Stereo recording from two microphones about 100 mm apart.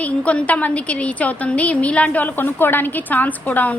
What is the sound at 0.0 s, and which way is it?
A woman's voice, 15° left (ahead or behind).